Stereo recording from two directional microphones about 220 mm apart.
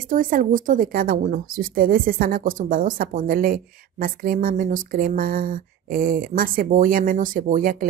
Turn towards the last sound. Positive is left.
turn(degrees=-40)  # may be behind; listen again after turning